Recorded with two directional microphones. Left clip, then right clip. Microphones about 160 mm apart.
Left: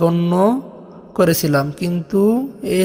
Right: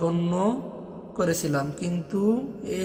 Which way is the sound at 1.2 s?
50° left (ahead or behind).